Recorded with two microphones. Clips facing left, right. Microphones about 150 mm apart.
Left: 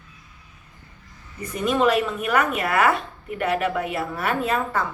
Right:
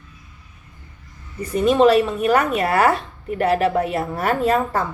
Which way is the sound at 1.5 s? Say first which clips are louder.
Right 6 dB; 30° right (ahead or behind).